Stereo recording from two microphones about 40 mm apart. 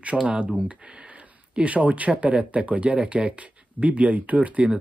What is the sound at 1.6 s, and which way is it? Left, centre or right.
Speech, right.